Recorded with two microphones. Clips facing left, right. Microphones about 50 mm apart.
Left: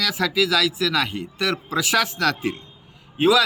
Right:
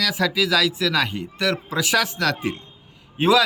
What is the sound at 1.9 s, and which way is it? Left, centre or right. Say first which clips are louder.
A man's voice: even; centre.